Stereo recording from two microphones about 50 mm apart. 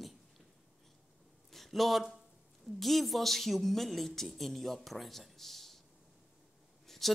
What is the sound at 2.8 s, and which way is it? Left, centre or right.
Speech, centre.